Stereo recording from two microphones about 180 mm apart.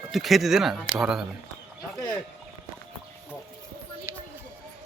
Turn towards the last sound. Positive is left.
turn(degrees=-15)  # may be behind; listen again after turning